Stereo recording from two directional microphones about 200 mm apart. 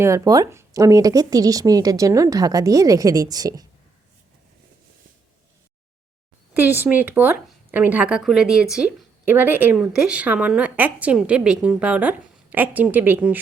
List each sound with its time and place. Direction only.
0.0 s speech: 15° right (ahead or behind)
6.5 s speech: 10° right (ahead or behind)